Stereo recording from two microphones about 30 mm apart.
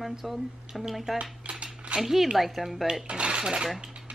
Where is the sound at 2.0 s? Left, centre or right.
Centre.